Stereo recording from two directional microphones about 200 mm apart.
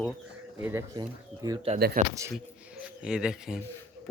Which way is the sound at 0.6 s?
10° right (ahead or behind).